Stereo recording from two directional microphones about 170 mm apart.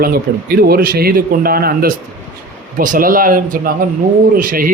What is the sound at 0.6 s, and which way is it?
Speech, 60° right (ahead or behind).